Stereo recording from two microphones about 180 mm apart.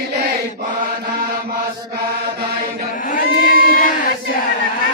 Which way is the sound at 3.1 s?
50° left (ahead or behind).